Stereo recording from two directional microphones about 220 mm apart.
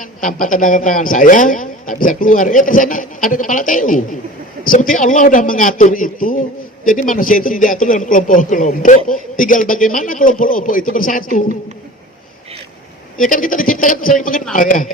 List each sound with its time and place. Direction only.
0.0 s a man's voice: 35° left (ahead or behind)
13.1 s a man's voice: 40° left (ahead or behind)